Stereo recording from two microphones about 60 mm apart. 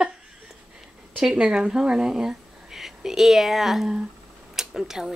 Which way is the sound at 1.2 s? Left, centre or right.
Centre.